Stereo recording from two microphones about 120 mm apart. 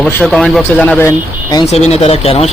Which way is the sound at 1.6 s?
60° left (ahead or behind).